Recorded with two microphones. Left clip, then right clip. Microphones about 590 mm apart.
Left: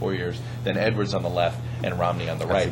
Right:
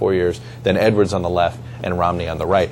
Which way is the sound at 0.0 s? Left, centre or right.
Right.